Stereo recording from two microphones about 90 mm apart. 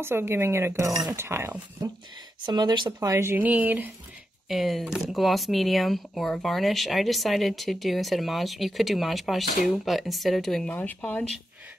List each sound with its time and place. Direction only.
0.0 s speech: 25° right (ahead or behind)
2.4 s speech: 55° right (ahead or behind)
3.0 s speech: 35° right (ahead or behind)
3.3 s speech: 20° right (ahead or behind)
4.5 s speech: centre (ahead or behind)
10.7 s speech: 15° left (ahead or behind)